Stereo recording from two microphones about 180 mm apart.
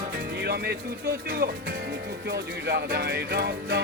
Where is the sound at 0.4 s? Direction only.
65° right (ahead or behind).